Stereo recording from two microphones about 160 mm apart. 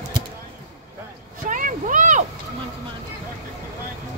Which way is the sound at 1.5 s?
55° right (ahead or behind).